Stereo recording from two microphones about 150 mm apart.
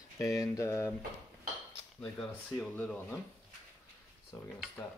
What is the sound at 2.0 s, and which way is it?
Speech, 5° left (ahead or behind).